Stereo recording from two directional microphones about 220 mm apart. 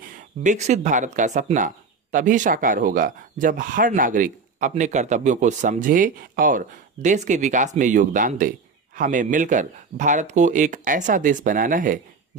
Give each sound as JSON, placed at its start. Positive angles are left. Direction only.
{"t": 0.4, "sound": "speech", "side_deg": -35}